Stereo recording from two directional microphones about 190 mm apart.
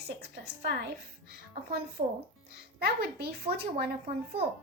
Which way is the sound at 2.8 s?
55° right (ahead or behind).